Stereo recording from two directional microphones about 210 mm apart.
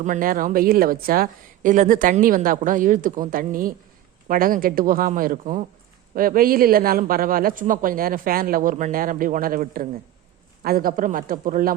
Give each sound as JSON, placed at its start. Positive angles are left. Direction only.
{"t": 0.0, "sound": "a woman's voice", "side_deg": -40}